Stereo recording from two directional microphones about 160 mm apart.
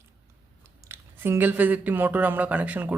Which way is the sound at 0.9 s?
15° right (ahead or behind).